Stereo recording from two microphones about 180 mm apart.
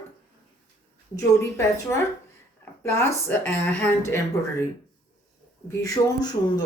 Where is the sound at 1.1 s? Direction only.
15° left (ahead or behind).